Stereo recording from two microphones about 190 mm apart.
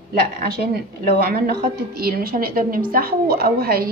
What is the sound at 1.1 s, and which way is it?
A woman's voice, 50° right (ahead or behind).